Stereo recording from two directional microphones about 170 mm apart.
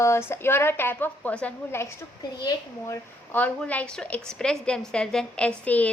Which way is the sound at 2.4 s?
25° left (ahead or behind).